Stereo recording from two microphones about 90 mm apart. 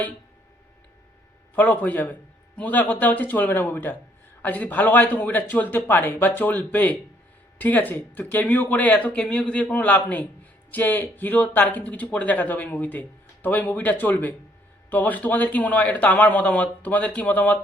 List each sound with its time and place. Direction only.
1.5 s a man's voice: 20° left (ahead or behind)